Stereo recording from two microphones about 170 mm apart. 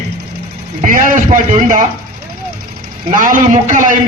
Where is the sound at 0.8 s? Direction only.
50° right (ahead or behind).